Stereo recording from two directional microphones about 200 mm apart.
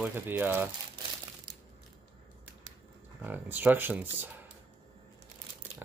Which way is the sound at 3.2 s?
10° right (ahead or behind).